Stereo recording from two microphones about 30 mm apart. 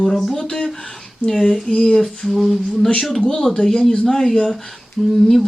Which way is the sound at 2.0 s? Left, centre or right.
Centre.